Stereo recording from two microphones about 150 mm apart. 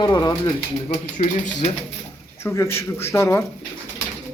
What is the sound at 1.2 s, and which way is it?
Speech, 50° left (ahead or behind).